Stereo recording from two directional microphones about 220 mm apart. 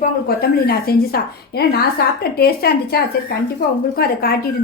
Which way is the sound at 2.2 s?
45° left (ahead or behind).